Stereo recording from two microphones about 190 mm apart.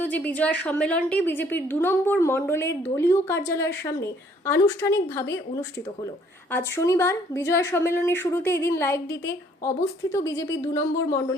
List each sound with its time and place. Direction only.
0.0 s a sound: 10° left (ahead or behind)
0.3 s a woman's voice: 5° left (ahead or behind)
6.5 s a woman's voice: 10° left (ahead or behind)